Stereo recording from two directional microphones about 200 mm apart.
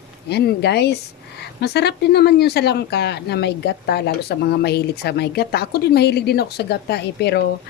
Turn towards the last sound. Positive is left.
turn(degrees=55)  # may be behind; listen again after turning